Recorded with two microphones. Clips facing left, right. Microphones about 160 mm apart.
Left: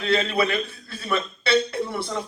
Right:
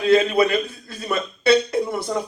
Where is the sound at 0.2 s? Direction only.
45° right (ahead or behind).